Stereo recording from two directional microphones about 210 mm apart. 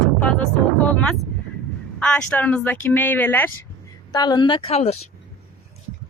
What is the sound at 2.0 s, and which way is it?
Speech, 5° left (ahead or behind).